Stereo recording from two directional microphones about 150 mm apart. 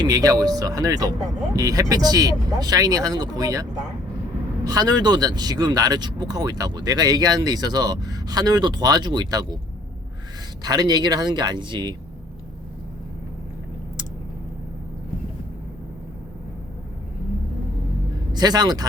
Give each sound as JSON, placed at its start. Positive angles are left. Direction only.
{"t": 0.0, "sound": "speech", "side_deg": -25}
{"t": 10.6, "sound": "speech", "side_deg": -25}
{"t": 18.3, "sound": "speech", "side_deg": -25}